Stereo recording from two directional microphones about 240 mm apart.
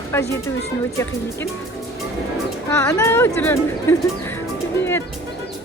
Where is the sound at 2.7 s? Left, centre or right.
Centre.